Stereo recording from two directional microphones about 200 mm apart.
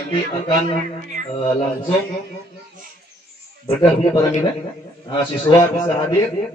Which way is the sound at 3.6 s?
25° left (ahead or behind).